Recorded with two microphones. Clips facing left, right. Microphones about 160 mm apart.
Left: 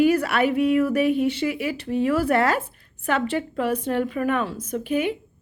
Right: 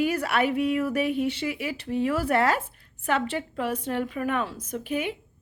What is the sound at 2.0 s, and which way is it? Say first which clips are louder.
Speech: left 3 dB; 30° right (ahead or behind).